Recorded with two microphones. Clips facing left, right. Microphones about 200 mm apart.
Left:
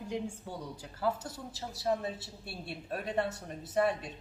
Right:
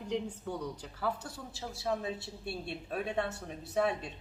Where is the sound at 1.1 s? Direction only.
20° left (ahead or behind).